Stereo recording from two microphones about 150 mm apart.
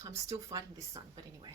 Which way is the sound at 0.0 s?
20° right (ahead or behind).